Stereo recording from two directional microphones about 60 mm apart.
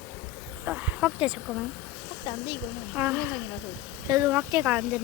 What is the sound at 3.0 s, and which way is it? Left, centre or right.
Speech, right.